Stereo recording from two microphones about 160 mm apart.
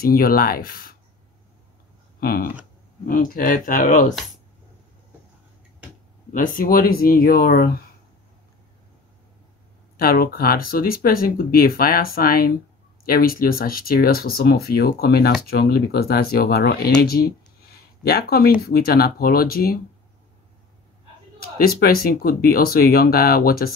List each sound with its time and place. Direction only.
0.0 s speech: 65° left (ahead or behind)
2.1 s speech: 70° left (ahead or behind)
6.3 s speech: 55° left (ahead or behind)
9.9 s speech: 65° left (ahead or behind)
21.4 s speech: 70° left (ahead or behind)